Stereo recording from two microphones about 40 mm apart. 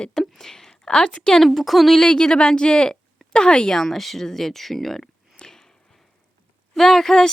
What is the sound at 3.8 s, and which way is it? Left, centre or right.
A woman's voice, centre.